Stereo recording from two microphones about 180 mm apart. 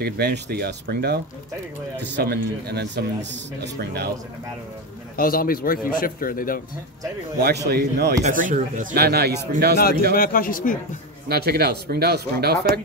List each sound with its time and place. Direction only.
0.0 s a man's voice: 65° right (ahead or behind)
5.1 s a man's voice: 55° left (ahead or behind)
7.3 s a man's voice: 65° right (ahead or behind)
8.2 s speech: 45° right (ahead or behind)
10.1 s a man's voice: 55° left (ahead or behind)
11.2 s a man's voice: 60° right (ahead or behind)